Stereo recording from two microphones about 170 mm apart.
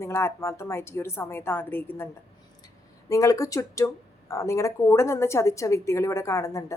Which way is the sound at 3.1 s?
20° left (ahead or behind).